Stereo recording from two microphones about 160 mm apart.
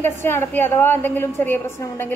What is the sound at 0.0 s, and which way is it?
A woman's voice, 15° left (ahead or behind).